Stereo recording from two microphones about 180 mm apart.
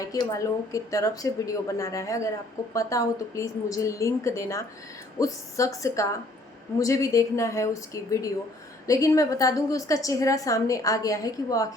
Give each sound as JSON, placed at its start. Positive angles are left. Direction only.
{"t": 0.0, "sound": "a woman's voice", "side_deg": 20}